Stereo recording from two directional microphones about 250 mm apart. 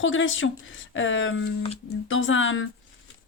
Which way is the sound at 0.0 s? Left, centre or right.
Left.